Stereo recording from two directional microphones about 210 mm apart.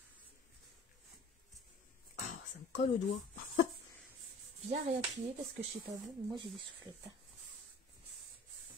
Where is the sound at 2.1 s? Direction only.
40° left (ahead or behind).